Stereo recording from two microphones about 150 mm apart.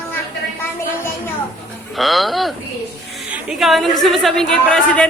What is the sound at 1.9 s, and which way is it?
A woman's voice, centre (ahead or behind).